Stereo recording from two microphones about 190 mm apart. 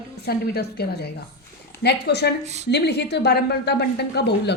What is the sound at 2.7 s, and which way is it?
A woman's voice, 60° left (ahead or behind).